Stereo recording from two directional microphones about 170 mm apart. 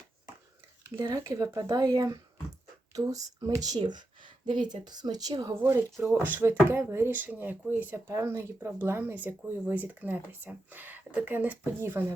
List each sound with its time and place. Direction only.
0.9 s speech: 20° right (ahead or behind)
3.4 s speech: 20° right (ahead or behind)